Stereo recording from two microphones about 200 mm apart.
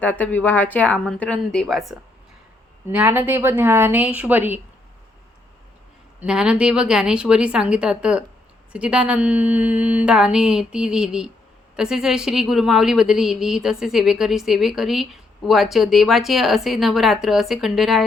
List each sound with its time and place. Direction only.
0.0 s a woman's voice: 10° left (ahead or behind); by 4.6 s 10° right (ahead or behind)
6.1 s a woman's voice: 5° right (ahead or behind)